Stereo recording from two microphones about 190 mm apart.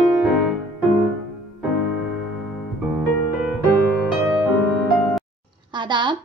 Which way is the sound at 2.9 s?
5° right (ahead or behind).